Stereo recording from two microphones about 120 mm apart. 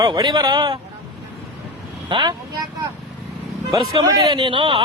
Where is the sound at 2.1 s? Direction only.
40° right (ahead or behind).